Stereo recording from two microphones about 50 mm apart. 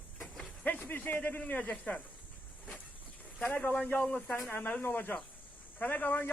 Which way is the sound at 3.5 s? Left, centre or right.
Left.